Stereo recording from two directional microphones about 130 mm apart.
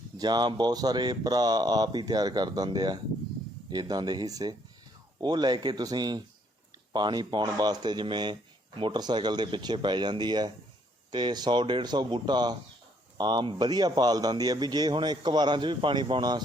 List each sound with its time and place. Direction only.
0.2 s a man's voice: 35° right (ahead or behind)